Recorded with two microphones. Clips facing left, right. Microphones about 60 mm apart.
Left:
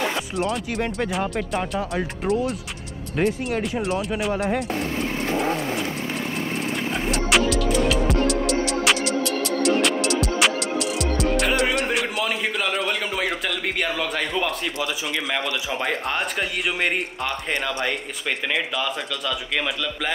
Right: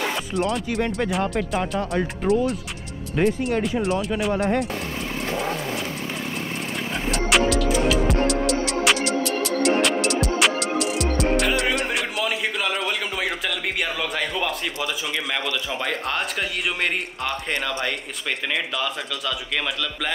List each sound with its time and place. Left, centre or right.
0.4 s a man's voice: centre
6.9 s music: centre
13.7 s a man's voice: centre